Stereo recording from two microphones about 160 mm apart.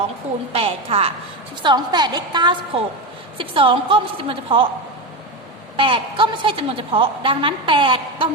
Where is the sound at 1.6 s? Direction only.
25° right (ahead or behind).